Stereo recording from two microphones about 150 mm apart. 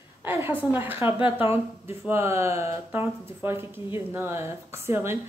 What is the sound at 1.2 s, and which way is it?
Speech, 35° left (ahead or behind).